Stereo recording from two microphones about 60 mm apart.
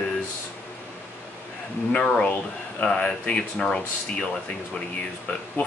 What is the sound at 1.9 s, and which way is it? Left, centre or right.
Speech, centre.